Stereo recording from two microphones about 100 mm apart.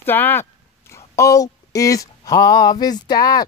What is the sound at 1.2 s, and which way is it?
Speech, 35° left (ahead or behind).